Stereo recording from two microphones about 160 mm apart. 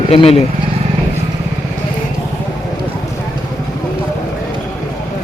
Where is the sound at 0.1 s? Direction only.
40° left (ahead or behind).